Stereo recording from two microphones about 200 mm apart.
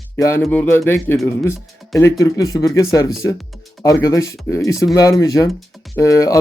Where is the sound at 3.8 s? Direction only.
15° left (ahead or behind).